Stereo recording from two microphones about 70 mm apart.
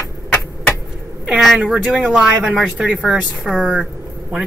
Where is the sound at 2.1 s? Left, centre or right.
Centre.